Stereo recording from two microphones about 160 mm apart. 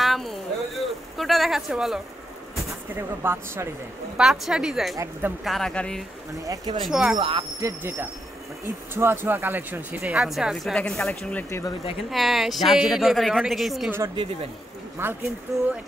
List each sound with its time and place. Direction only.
0.0 s a sound: centre (ahead or behind)
3.0 s speech: 15° right (ahead or behind)
4.2 s speech: 5° right (ahead or behind)
4.9 s speech: 20° right (ahead or behind)
5.4 s speech: centre (ahead or behind)
6.4 s speech: 25° right (ahead or behind)
6.8 s speech: centre (ahead or behind)
7.2 s speech: 35° right (ahead or behind)
7.6 s speech: 15° right (ahead or behind)
15.0 s speech: 15° right (ahead or behind)